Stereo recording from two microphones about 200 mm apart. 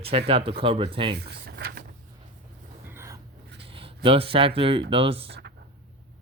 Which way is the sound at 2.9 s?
15° right (ahead or behind).